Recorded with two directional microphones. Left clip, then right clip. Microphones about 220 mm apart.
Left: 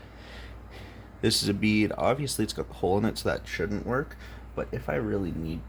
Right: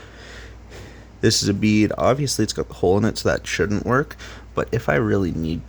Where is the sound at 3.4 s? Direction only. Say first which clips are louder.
Right 9 dB; 45° right (ahead or behind).